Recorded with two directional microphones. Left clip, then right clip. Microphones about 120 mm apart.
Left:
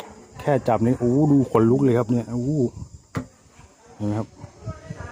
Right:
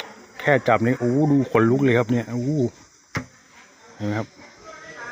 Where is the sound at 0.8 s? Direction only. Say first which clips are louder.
Even; 20° left (ahead or behind).